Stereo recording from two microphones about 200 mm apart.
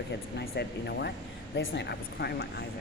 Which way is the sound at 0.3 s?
55° left (ahead or behind).